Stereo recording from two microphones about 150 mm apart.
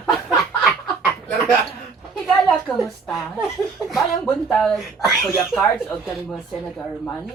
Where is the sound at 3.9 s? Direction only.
Centre (ahead or behind).